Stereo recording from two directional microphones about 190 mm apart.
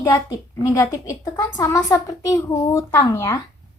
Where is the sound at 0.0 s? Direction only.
15° left (ahead or behind).